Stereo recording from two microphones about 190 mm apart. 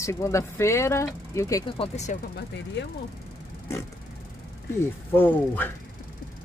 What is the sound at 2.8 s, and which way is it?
Speech, 65° left (ahead or behind).